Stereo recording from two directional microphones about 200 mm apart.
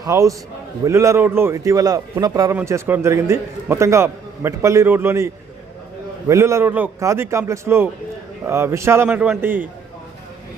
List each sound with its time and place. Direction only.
0.0 s a man's voice: 15° right (ahead or behind)